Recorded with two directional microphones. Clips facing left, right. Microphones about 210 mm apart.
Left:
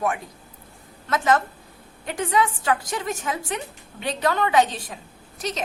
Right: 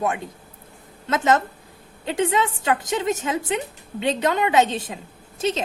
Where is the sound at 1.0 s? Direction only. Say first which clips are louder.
Right 1 dB; 25° right (ahead or behind).